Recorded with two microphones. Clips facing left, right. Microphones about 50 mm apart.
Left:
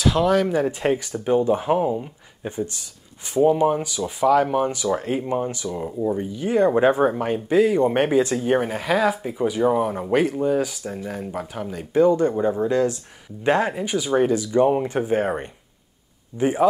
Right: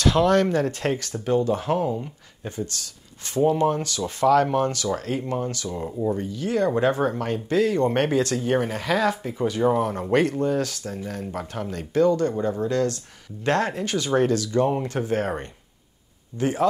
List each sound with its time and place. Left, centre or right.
0.0 s speech: centre
6.1 s speech: centre
11.9 s speech: centre